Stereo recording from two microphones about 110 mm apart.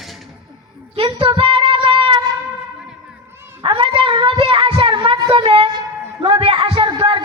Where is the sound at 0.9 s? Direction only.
55° right (ahead or behind).